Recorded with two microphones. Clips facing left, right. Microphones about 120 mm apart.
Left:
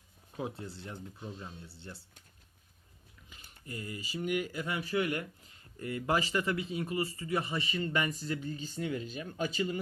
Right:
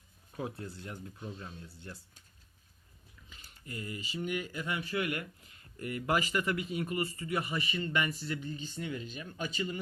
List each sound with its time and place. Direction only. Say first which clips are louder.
0.3 s speech: even; 25° left (ahead or behind)
1.2 s speech: even; 10° left (ahead or behind)
3.7 s speech: even; 30° left (ahead or behind)